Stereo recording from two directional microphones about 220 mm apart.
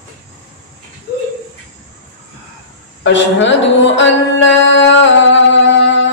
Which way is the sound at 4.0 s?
55° left (ahead or behind).